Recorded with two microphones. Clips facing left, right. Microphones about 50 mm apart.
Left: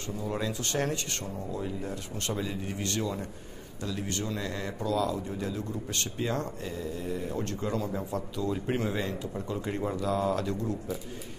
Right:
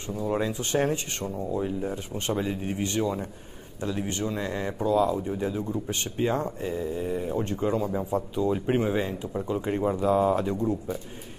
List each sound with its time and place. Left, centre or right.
0.3 s speech: right